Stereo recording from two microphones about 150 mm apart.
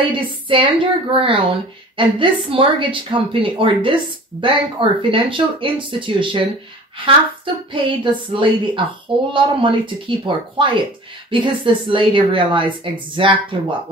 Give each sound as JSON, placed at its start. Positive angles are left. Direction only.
{"t": 0.0, "sound": "speech", "side_deg": -35}
{"t": 7.7, "sound": "speech", "side_deg": -35}